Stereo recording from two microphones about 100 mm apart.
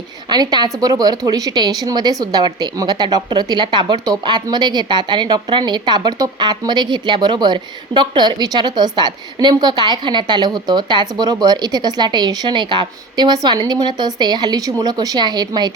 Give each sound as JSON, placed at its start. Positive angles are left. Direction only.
{"t": 0.3, "sound": "a woman's voice", "side_deg": -45}